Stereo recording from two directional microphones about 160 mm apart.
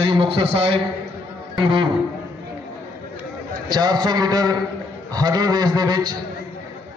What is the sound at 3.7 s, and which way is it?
A man's voice, 25° right (ahead or behind).